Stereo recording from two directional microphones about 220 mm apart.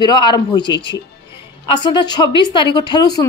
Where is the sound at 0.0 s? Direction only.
20° left (ahead or behind).